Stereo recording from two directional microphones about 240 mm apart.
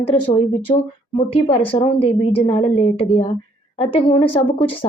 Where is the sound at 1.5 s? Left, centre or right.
Left.